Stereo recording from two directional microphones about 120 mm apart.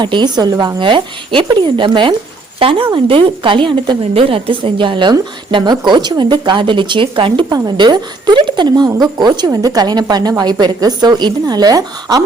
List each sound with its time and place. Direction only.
0.0 s a woman's voice: 40° right (ahead or behind)